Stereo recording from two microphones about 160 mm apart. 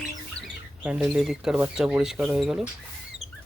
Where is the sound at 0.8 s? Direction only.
5° right (ahead or behind).